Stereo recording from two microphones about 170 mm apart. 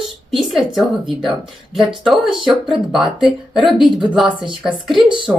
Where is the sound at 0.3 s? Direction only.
Centre (ahead or behind).